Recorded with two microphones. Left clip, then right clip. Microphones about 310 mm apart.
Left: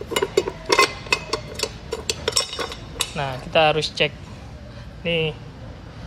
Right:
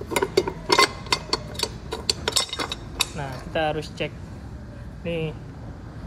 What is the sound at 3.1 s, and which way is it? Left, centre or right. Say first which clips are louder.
Speech: left 8 dB; centre.